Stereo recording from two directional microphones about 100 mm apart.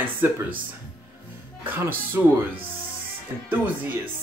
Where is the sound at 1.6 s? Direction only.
20° right (ahead or behind).